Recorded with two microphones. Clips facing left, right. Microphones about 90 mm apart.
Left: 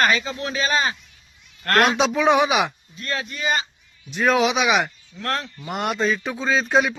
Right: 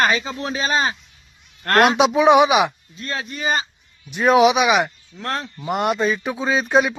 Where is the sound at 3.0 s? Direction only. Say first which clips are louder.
Right 1 dB; 30° right (ahead or behind).